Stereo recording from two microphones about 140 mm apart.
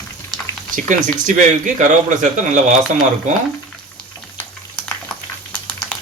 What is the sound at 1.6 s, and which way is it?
Speech, 65° right (ahead or behind).